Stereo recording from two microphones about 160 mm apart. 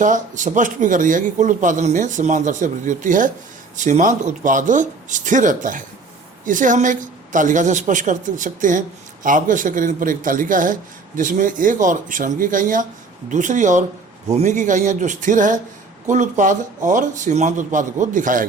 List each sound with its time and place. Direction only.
0.0 s a man's voice: 50° right (ahead or behind)